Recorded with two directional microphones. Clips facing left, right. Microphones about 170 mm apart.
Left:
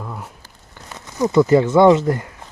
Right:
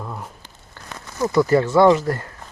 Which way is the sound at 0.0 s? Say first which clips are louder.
Even; centre (ahead or behind).